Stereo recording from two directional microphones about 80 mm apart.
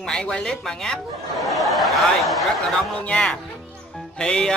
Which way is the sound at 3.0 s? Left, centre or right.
Centre.